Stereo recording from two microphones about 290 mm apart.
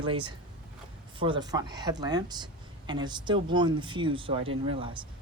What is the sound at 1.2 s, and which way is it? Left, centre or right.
Speech, centre.